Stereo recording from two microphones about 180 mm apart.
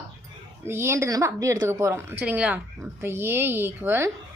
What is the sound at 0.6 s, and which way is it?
A woman's voice, 15° right (ahead or behind).